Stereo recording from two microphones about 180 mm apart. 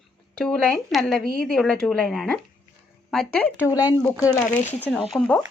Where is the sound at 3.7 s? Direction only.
20° left (ahead or behind).